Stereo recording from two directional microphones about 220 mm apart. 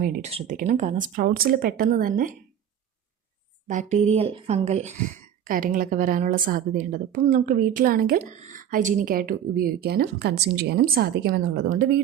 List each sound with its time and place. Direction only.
0.0 s a woman's voice: 35° right (ahead or behind)
3.7 s a woman's voice: 35° right (ahead or behind)